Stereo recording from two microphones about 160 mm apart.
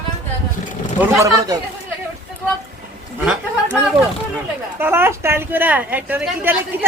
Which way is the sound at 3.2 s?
5° right (ahead or behind).